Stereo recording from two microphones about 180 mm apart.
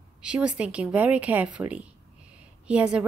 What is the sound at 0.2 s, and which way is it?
A woman's voice, 5° right (ahead or behind).